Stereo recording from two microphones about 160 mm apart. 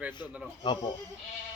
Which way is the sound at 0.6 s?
30° left (ahead or behind).